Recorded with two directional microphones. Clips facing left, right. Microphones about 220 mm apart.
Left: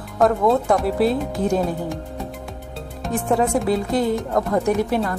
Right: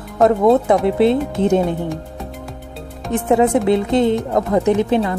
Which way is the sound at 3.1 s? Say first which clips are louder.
Right 5 dB; 20° right (ahead or behind).